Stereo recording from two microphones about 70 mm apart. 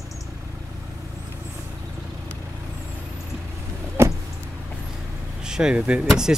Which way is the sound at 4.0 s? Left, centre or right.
Right.